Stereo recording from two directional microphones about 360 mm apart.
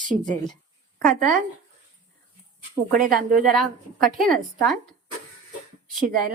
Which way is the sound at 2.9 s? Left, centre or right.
Right.